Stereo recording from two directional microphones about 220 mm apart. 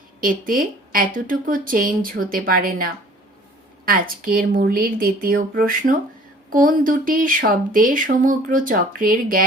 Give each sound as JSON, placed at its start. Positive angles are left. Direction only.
{"t": 0.2, "sound": "speech", "side_deg": -40}